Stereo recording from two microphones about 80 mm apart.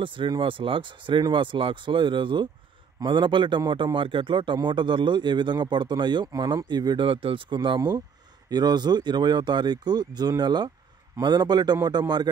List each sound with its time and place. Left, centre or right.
0.0 s speech: right
6.2 s speech: right
8.5 s speech: right